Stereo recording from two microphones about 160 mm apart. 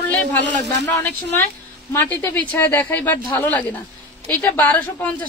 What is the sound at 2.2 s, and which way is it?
Speech, 10° left (ahead or behind).